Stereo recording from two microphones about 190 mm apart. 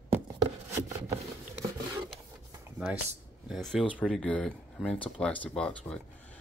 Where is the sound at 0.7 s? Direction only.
15° right (ahead or behind).